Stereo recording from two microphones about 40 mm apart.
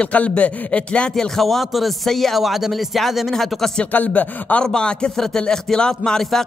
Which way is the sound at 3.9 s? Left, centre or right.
Left.